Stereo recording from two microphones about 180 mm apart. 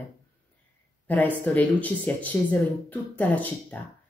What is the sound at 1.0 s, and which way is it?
Speech, 10° left (ahead or behind).